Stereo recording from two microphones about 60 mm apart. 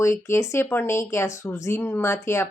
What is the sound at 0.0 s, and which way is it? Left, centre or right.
Speech, left.